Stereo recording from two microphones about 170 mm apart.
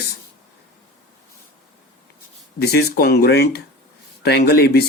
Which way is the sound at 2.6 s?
70° left (ahead or behind).